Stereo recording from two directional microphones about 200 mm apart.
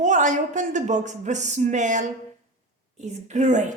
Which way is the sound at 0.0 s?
40° right (ahead or behind).